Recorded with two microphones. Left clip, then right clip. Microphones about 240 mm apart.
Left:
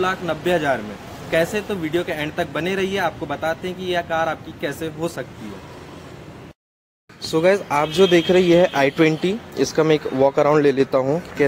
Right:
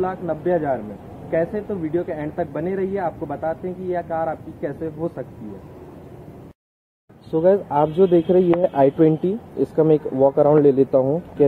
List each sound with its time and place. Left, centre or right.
0.0 s speech: left
7.3 s speech: left
8.1 s speech: centre
10.1 s speech: left
10.6 s speech: centre
10.9 s speech: left